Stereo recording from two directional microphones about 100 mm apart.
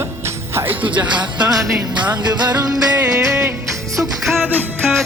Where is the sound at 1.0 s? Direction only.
50° right (ahead or behind).